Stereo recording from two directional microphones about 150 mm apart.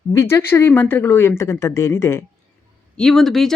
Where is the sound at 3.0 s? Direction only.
5° left (ahead or behind).